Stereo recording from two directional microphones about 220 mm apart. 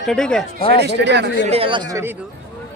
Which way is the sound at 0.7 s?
50° right (ahead or behind).